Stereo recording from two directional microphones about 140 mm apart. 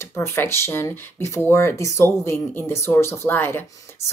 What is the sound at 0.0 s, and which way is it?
Speech, 20° left (ahead or behind).